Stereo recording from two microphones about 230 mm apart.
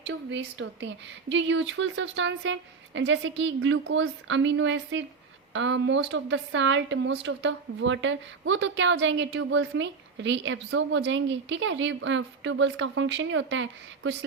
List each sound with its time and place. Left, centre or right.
0.0 s a woman's voice: right